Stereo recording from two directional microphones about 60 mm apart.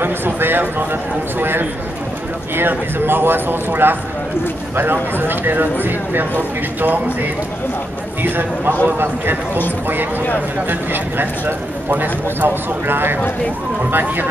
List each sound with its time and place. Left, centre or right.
0.0 s speech: right
10.7 s speech: right